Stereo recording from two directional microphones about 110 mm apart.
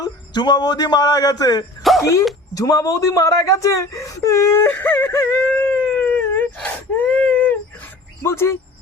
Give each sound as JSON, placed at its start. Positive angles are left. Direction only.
{"t": 0.0, "sound": "a man's voice", "side_deg": 40}
{"t": 1.8, "sound": "a sound", "side_deg": 0}
{"t": 2.6, "sound": "speech", "side_deg": 30}
{"t": 8.2, "sound": "speech", "side_deg": 25}